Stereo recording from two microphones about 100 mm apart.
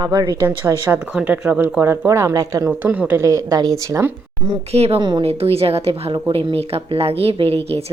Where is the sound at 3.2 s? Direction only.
35° right (ahead or behind).